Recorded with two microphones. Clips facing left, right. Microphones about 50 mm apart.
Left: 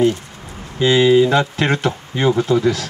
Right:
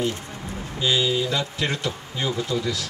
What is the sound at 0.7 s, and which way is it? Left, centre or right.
Speech, left.